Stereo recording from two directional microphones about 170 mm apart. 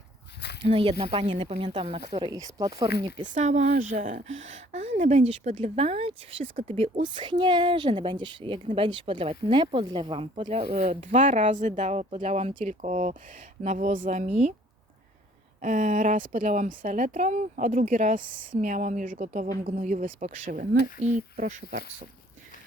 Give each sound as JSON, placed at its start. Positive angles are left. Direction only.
{"t": 0.7, "sound": "speech", "side_deg": -30}
{"t": 3.2, "sound": "speech", "side_deg": -45}
{"t": 10.4, "sound": "speech", "side_deg": -45}
{"t": 15.6, "sound": "speech", "side_deg": -45}